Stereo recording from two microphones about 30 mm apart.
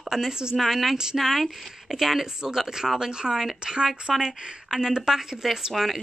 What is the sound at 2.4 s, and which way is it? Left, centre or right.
Speech, right.